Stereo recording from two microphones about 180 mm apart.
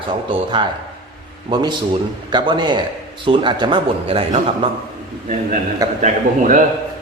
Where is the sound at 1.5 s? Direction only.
25° right (ahead or behind).